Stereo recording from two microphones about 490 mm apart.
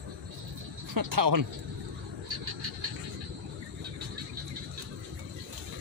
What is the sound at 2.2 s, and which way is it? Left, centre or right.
Vehicle, right.